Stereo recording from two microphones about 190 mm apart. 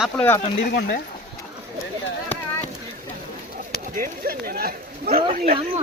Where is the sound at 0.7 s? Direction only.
55° left (ahead or behind).